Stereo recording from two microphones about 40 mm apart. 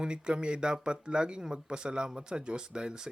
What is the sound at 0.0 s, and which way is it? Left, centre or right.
Speech, right.